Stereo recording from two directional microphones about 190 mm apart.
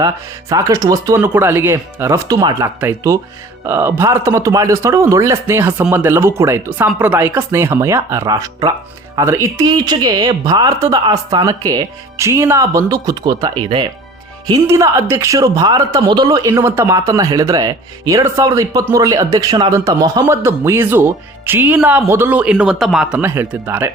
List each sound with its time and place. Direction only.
0.5 s speech: 15° right (ahead or behind)